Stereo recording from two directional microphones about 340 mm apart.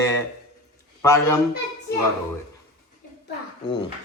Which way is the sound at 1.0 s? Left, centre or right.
Centre.